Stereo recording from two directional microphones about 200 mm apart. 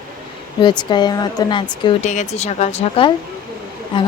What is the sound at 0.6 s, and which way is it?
Speech, 20° left (ahead or behind).